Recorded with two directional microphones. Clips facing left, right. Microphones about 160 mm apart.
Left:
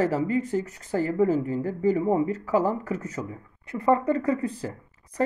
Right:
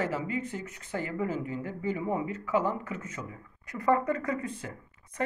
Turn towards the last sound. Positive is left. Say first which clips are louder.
# left 3 dB
turn(degrees=35)  # may be behind; listen again after turning